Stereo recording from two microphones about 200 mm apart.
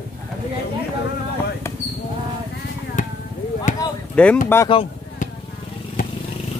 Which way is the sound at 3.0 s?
35° left (ahead or behind).